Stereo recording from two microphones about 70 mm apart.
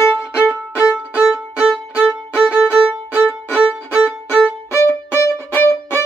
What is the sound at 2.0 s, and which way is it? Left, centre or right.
Violin, centre.